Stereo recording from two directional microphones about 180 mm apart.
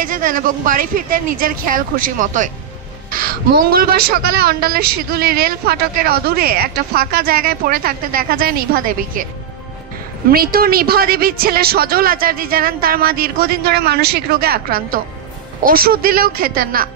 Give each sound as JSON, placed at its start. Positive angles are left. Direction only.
{"t": 0.0, "sound": "speech", "side_deg": -50}
{"t": 3.7, "sound": "speech", "side_deg": -60}
{"t": 10.3, "sound": "speech", "side_deg": -55}